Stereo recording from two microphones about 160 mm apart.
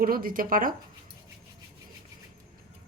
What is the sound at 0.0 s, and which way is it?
Speech, 65° right (ahead or behind).